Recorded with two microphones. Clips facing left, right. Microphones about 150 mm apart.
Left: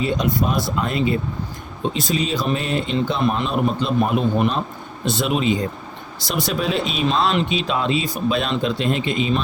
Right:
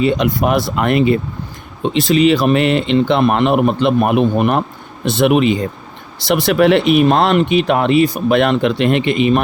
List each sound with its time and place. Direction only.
0.0 s speech: 75° right (ahead or behind)